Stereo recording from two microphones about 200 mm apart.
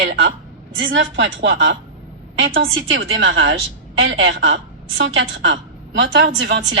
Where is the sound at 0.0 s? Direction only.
60° right (ahead or behind).